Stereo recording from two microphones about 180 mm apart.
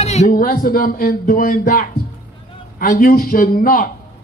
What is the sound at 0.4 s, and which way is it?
A man's voice, 55° left (ahead or behind).